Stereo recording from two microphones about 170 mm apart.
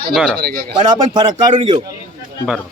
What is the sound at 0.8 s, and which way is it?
Speech, 30° right (ahead or behind).